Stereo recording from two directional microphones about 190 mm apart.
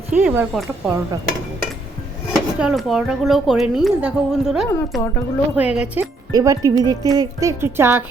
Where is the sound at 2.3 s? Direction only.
5° right (ahead or behind).